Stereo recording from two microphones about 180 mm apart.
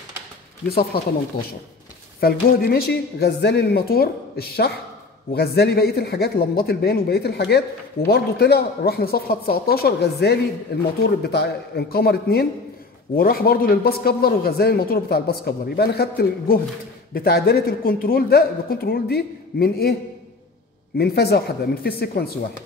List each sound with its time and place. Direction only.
2.1 s a man's voice: 60° left (ahead or behind)
21.0 s a man's voice: 60° left (ahead or behind)